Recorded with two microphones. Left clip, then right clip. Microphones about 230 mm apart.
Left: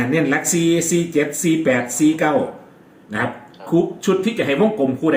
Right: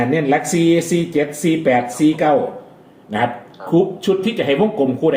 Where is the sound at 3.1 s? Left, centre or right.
Centre.